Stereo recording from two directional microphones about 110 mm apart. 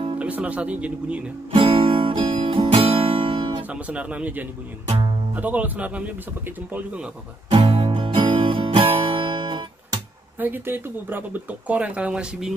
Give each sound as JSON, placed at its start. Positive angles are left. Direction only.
{"t": 0.2, "sound": "speech", "side_deg": -10}
{"t": 1.5, "sound": "music", "side_deg": -55}
{"t": 3.9, "sound": "speech", "side_deg": -10}
{"t": 7.5, "sound": "music", "side_deg": -60}
{"t": 10.4, "sound": "speech", "side_deg": -15}